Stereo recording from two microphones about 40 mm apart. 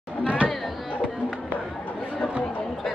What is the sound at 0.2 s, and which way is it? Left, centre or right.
Chatter, right.